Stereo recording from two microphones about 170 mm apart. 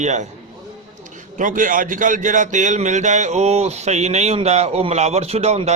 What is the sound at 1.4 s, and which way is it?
A man's voice, 50° right (ahead or behind).